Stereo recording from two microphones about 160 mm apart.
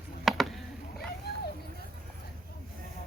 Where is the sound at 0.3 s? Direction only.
Centre (ahead or behind).